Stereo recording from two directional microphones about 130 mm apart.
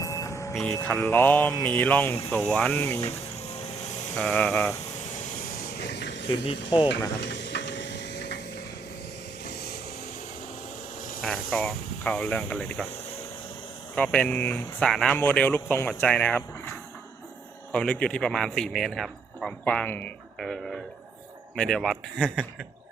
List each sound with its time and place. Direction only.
0.0 s music: 25° left (ahead or behind)
0.5 s speech: 5° left (ahead or behind)
3.5 s vehicle: 60° left (ahead or behind)
4.2 s speech: 10° left (ahead or behind)
5.2 s vehicle: 85° left
6.4 s speech: 40° left (ahead or behind)
11.2 s a man's voice: 5° left (ahead or behind)
13.9 s a man's voice: 10° left (ahead or behind)
20.4 s a man's voice: centre (ahead or behind)